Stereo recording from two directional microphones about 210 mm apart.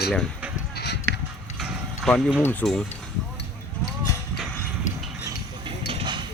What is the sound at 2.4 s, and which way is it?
Speech, 5° left (ahead or behind).